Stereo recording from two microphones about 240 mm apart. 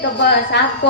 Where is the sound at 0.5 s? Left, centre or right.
Left.